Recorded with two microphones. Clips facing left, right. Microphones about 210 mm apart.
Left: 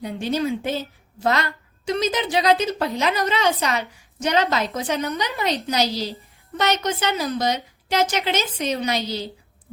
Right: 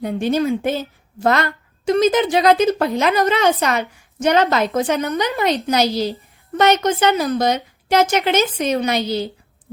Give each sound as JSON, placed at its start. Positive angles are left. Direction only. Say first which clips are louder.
{"t": 0.0, "sound": "a woman's voice", "louder": "right 5 dB", "side_deg": -50}